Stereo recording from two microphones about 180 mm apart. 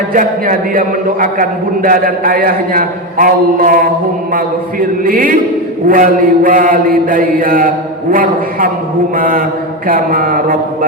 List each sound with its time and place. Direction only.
0.1 s a man's voice: 50° right (ahead or behind)